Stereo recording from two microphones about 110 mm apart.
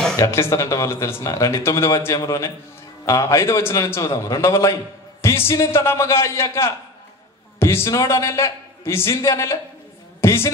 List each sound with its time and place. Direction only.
0.3 s speech: 25° left (ahead or behind)